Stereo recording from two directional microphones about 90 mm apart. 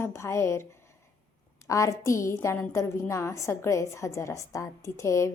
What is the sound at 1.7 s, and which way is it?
A woman's voice, 35° left (ahead or behind).